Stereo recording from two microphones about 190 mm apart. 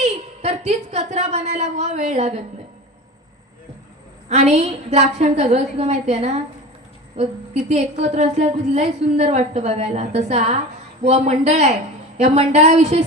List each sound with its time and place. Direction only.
0.0 s a woman's voice: 35° right (ahead or behind)
4.3 s a woman's voice: 35° right (ahead or behind)